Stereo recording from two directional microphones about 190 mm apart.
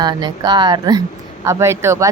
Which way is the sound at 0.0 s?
20° right (ahead or behind).